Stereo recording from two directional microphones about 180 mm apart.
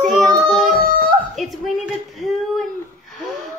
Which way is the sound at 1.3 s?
Centre (ahead or behind).